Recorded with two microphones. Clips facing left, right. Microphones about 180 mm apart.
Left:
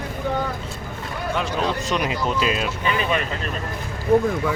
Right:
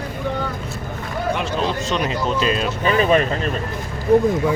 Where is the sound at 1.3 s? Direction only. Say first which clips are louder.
Even; 20° right (ahead or behind).